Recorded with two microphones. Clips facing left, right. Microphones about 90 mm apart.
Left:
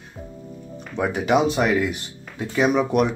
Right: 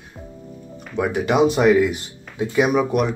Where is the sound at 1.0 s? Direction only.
Centre (ahead or behind).